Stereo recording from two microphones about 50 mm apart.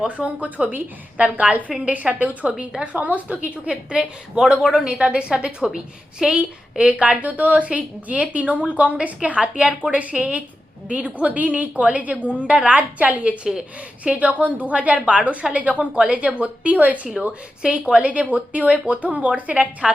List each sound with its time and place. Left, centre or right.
0.1 s a woman's voice: right; by 6.3 s centre
6.3 s a woman's voice: right
14.2 s a woman's voice: right